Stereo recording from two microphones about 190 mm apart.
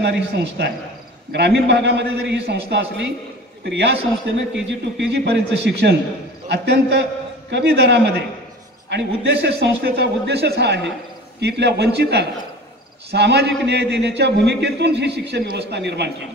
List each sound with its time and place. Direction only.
0.0 s a man's voice: 60° right (ahead or behind)
4.4 s a man's voice: 70° right (ahead or behind)